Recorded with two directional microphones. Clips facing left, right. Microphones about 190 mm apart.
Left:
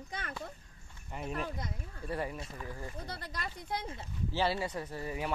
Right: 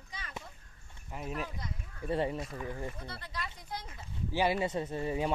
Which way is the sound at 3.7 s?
60° left (ahead or behind).